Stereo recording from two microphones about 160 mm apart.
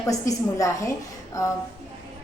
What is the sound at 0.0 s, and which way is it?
Speech, 20° left (ahead or behind).